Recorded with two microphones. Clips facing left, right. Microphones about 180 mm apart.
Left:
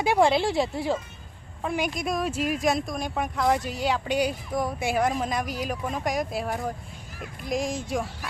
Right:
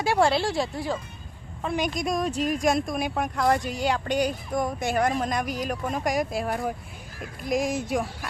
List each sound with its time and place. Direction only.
0.0 s speech: 15° left (ahead or behind)
1.6 s speech: 10° left (ahead or behind)